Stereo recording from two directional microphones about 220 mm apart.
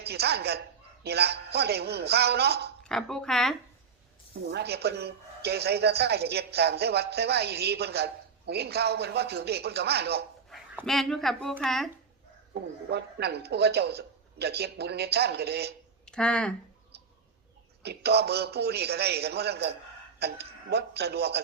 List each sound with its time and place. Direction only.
0.0 s a woman's voice: 45° right (ahead or behind)
2.8 s speech: 5° left (ahead or behind)
4.4 s a woman's voice: 45° right (ahead or behind)
10.5 s speech: centre (ahead or behind)
12.9 s a woman's voice: 50° right (ahead or behind)
16.0 s speech: 5° left (ahead or behind)
16.9 s bird: 45° right (ahead or behind)
17.8 s a woman's voice: 45° right (ahead or behind)